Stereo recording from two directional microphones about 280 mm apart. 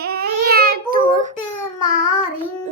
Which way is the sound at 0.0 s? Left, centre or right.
Right.